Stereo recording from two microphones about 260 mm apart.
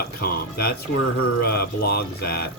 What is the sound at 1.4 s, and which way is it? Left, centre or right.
Speech, left.